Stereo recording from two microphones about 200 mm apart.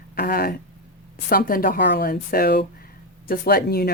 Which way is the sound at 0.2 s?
50° left (ahead or behind).